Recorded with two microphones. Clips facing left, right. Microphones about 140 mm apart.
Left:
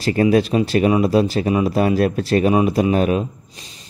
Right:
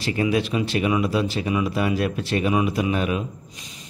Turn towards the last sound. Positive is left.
turn(degrees=30)  # may be behind; listen again after turning